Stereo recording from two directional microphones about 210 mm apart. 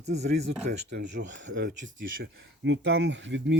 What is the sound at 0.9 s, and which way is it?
Speech, 55° right (ahead or behind).